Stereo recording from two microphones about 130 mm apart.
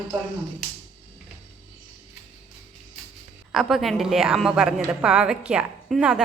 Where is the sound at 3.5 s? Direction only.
Centre (ahead or behind).